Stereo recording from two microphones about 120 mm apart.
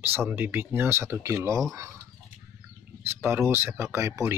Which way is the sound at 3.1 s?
20° right (ahead or behind).